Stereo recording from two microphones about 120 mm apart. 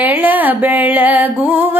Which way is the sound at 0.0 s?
15° right (ahead or behind).